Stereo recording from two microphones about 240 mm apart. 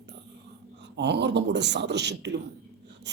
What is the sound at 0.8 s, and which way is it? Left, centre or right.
Speech, right.